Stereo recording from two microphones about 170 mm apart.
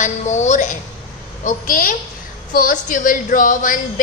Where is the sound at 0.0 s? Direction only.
45° left (ahead or behind).